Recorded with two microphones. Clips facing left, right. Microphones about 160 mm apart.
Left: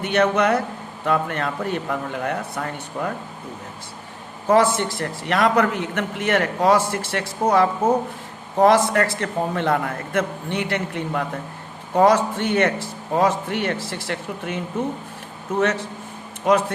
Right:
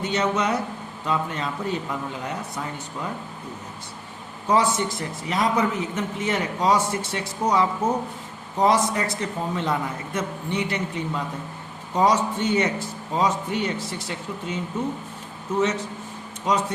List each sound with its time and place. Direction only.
0.0 s a man's voice: 60° left (ahead or behind)
4.4 s a man's voice: 60° left (ahead or behind)